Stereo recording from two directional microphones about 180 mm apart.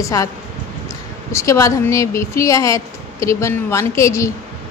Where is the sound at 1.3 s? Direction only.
15° left (ahead or behind).